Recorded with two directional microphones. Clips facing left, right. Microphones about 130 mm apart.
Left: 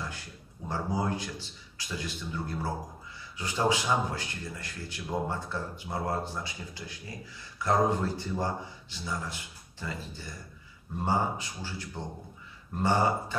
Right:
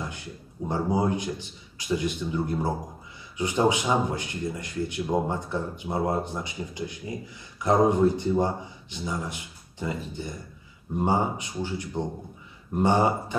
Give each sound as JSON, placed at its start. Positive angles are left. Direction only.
{"t": 0.7, "sound": "a man's voice", "side_deg": -20}